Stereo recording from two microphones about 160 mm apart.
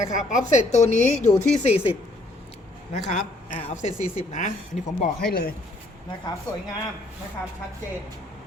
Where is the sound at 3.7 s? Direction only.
50° left (ahead or behind).